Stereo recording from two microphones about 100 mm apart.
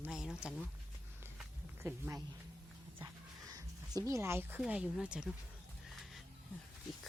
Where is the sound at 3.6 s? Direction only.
30° right (ahead or behind).